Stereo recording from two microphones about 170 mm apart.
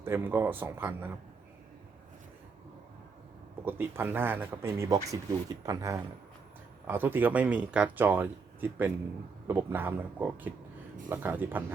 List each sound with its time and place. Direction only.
0.0 s speech: 15° right (ahead or behind)
3.7 s speech: 15° right (ahead or behind)